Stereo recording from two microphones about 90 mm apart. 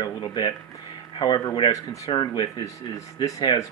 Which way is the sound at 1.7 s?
40° left (ahead or behind).